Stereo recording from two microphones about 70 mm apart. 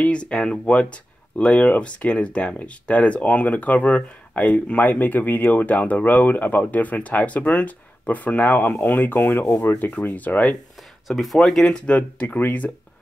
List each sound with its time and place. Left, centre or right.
0.0 s speech: centre
11.1 s speech: centre; by 12.7 s left